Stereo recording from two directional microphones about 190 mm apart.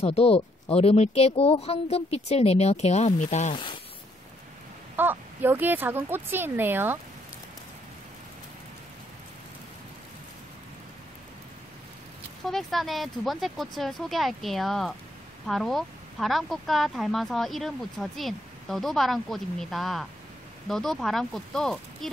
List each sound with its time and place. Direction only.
0.0 s speech: 35° left (ahead or behind)
4.9 s speech: 10° right (ahead or behind)
12.4 s speech: centre (ahead or behind)